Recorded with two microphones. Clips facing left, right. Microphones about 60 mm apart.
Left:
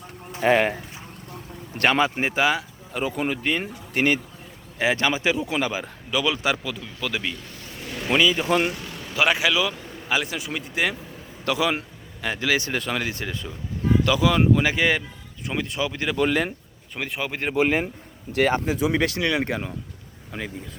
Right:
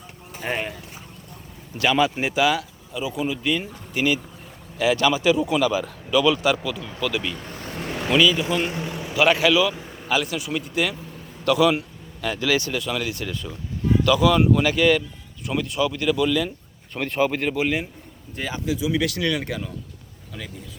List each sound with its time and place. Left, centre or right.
0.3 s speech: left
1.7 s speech: left
2.9 s speech: left
4.8 s speech: left
7.3 s vehicle: right
8.1 s speech: left
8.4 s speech: left
8.7 s a sound: right
9.2 s speech: centre
16.9 s speech: centre
17.4 s speech: left
18.4 s speech: left
19.0 s speech: left